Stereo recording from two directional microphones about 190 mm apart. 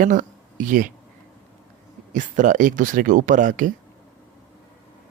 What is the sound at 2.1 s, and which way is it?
Speech, 40° right (ahead or behind).